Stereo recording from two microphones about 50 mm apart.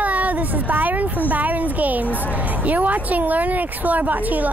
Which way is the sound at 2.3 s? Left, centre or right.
Right.